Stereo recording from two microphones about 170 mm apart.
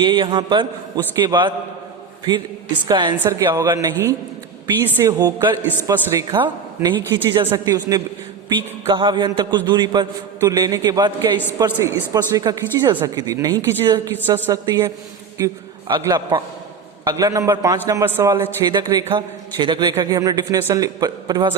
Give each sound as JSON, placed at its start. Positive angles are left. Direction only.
{"t": 0.0, "sound": "a man's voice", "side_deg": -30}
{"t": 2.8, "sound": "a man's voice", "side_deg": -25}
{"t": 14.6, "sound": "a man's voice", "side_deg": -25}